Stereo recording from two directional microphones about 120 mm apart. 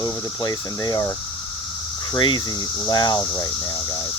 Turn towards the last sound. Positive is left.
turn(degrees=35)  # may be behind; listen again after turning